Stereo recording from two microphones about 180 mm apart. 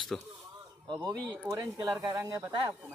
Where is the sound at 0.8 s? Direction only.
20° right (ahead or behind).